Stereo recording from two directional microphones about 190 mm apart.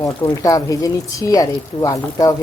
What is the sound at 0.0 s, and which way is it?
Speech, 20° left (ahead or behind).